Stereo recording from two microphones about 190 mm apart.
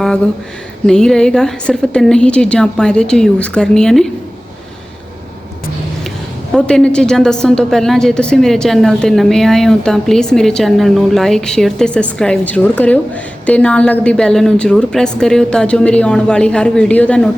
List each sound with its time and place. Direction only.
0.9 s a woman's voice: 5° left (ahead or behind)
6.5 s a woman's voice: 5° left (ahead or behind)